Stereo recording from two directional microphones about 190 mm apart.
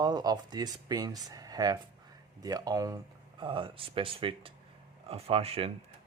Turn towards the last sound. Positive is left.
turn(degrees=-30)  # may be behind; listen again after turning